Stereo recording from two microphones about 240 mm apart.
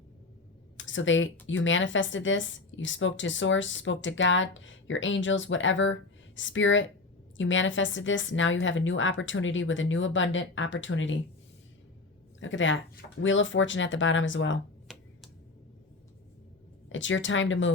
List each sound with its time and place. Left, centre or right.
0.8 s a woman's voice: left
12.4 s a woman's voice: left
14.9 s a sound: centre
16.9 s a woman's voice: left